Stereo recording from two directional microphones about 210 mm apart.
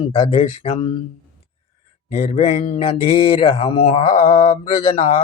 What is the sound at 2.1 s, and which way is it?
Speech, 30° left (ahead or behind).